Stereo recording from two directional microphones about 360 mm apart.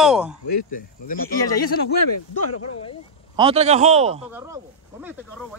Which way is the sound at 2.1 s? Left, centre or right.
Left.